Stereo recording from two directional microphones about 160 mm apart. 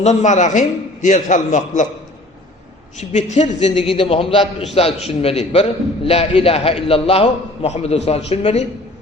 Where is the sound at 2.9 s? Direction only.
45° left (ahead or behind).